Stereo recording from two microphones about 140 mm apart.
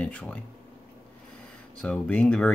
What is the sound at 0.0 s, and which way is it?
Speech, 10° left (ahead or behind).